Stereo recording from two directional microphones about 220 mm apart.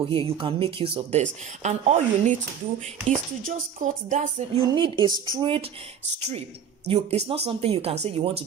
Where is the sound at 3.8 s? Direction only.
35° right (ahead or behind).